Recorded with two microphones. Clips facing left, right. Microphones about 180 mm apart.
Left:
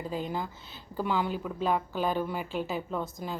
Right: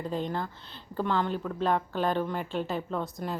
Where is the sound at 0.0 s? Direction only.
5° left (ahead or behind).